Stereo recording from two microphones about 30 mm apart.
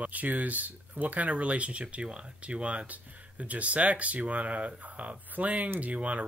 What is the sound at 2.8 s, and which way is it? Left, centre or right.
Speech, right.